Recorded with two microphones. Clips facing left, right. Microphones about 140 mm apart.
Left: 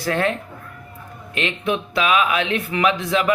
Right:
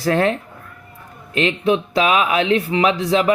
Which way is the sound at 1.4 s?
30° right (ahead or behind).